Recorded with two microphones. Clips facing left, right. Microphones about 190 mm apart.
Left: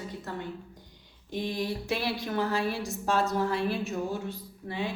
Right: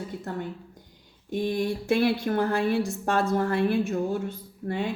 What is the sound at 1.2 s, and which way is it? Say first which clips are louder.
A woman's voice: right 5 dB; 50° right (ahead or behind).